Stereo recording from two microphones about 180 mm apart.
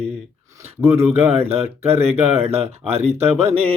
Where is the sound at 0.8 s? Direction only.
15° right (ahead or behind).